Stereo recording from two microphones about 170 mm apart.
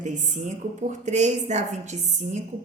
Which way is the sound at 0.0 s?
45° right (ahead or behind).